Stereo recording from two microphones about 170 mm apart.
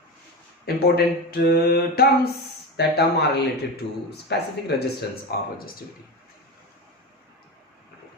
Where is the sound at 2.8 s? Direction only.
70° left (ahead or behind).